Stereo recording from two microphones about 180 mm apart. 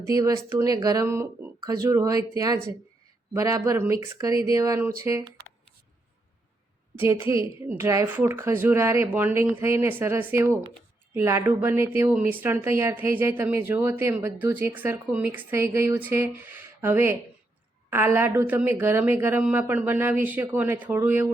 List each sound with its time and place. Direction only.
0.0 s speech: 20° right (ahead or behind)
7.0 s speech: 15° right (ahead or behind)